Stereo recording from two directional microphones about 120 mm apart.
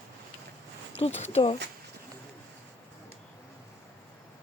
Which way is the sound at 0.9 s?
60° left (ahead or behind).